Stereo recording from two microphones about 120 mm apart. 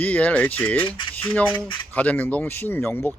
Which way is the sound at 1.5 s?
45° left (ahead or behind).